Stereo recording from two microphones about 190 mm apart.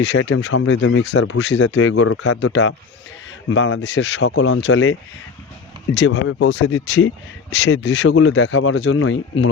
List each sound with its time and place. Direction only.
0.0 s speech: 70° left (ahead or behind)
5.9 s speech: 65° left (ahead or behind)